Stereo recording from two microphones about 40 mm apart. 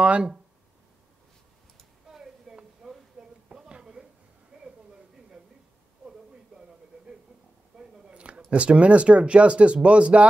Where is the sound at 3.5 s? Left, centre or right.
Centre.